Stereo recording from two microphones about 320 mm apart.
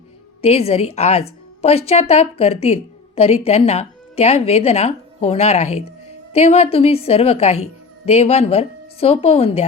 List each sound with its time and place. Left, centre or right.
0.4 s a woman's voice: centre